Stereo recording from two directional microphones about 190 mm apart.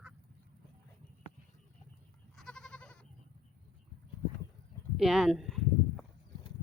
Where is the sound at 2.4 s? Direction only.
5° left (ahead or behind).